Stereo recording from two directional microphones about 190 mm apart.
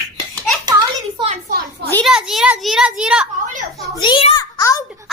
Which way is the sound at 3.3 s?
40° right (ahead or behind).